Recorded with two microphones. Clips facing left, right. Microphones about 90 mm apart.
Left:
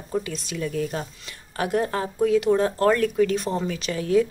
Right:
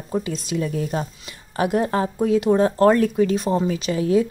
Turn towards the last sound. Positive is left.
turn(degrees=-25)  # may be behind; listen again after turning